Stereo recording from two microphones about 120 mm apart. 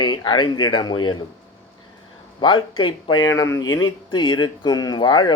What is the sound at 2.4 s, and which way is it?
Speech, 40° left (ahead or behind).